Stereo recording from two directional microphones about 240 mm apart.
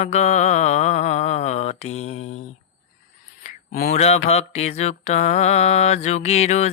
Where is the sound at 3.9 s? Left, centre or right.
Left.